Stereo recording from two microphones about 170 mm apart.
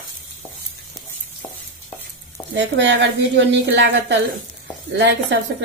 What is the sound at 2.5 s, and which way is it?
A woman's voice, 90° right.